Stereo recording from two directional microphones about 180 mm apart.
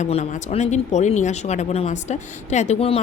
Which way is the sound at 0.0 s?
40° left (ahead or behind).